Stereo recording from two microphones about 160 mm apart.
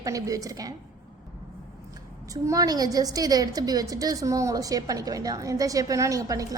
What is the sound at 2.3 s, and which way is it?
A woman's voice, 20° right (ahead or behind).